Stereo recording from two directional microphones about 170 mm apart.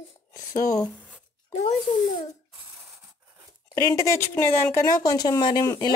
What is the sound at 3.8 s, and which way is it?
Speech, 20° left (ahead or behind).